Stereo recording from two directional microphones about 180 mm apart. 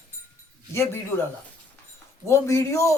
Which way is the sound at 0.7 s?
15° left (ahead or behind).